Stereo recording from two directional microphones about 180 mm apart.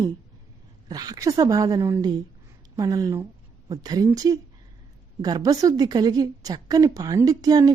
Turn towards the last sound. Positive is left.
turn(degrees=-20)  # may be behind; listen again after turning